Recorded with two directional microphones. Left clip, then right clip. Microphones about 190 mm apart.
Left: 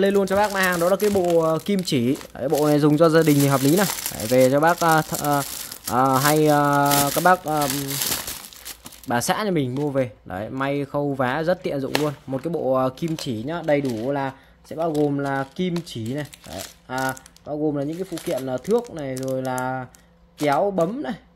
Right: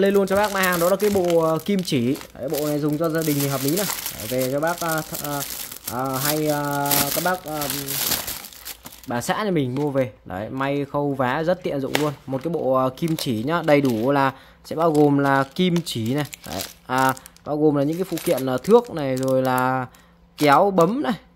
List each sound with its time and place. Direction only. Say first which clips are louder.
0.0 s speech: even; centre (ahead or behind)
2.3 s speech: left 4 dB; 25° left (ahead or behind)
2.6 s speech: left 7 dB; 40° left (ahead or behind)
9.0 s speech: left 2 dB; 15° left (ahead or behind); by 13.1 s 5° right (ahead or behind)
13.1 s speech: right 5 dB; 20° right (ahead or behind)